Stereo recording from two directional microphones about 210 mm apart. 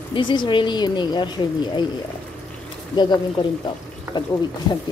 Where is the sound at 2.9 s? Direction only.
20° left (ahead or behind).